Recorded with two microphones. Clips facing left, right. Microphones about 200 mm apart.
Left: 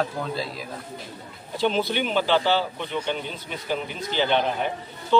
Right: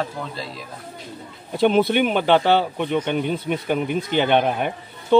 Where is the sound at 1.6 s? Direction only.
55° right (ahead or behind).